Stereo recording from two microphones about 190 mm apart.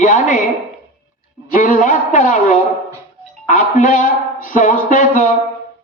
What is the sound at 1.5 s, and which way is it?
A man's voice, 45° left (ahead or behind).